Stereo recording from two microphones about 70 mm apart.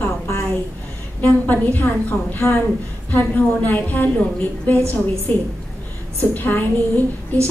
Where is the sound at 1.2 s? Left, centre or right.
Left.